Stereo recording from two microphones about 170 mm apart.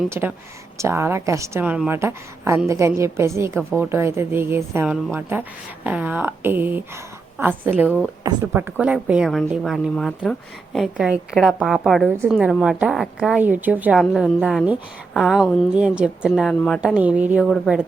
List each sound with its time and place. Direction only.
0.1 s a woman's voice: 10° right (ahead or behind)
12.0 s a woman's voice: 15° right (ahead or behind)
12.3 s a woman's voice: 5° right (ahead or behind)